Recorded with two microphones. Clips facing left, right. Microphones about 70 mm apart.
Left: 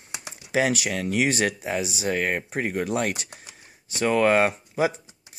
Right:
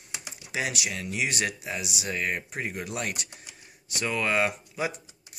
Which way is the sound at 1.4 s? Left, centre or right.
Left.